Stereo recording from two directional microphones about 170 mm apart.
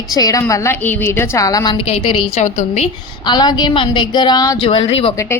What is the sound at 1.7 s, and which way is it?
Speech, 35° left (ahead or behind).